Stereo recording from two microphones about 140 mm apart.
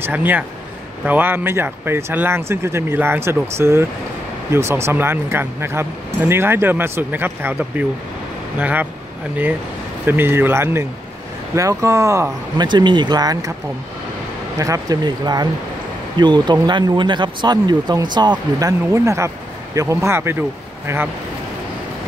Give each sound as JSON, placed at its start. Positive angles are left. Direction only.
{"t": 0.0, "sound": "speech", "side_deg": -15}
{"t": 10.0, "sound": "speech", "side_deg": -15}
{"t": 14.6, "sound": "speech", "side_deg": -25}